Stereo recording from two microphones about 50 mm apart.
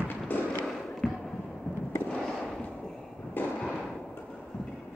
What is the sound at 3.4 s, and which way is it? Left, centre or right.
Fireworks, left.